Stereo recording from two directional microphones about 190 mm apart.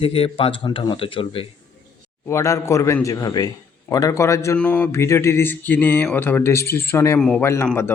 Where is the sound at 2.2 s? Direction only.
15° left (ahead or behind).